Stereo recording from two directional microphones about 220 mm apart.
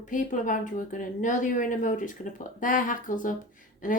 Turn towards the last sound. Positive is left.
turn(degrees=35)  # may be behind; listen again after turning